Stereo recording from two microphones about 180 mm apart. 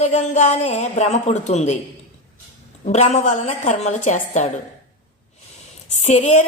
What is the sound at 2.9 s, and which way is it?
Speech, 40° left (ahead or behind).